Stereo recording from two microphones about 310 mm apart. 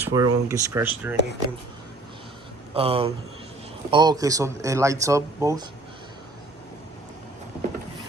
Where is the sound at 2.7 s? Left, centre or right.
Centre.